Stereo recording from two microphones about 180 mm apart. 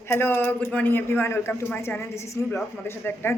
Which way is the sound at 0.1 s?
10° left (ahead or behind).